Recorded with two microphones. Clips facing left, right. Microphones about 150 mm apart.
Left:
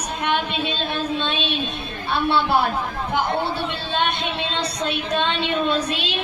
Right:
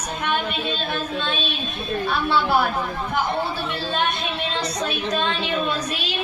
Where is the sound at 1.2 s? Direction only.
25° left (ahead or behind).